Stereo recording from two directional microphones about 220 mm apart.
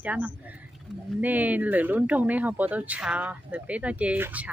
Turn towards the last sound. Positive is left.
turn(degrees=-5)  # may be behind; listen again after turning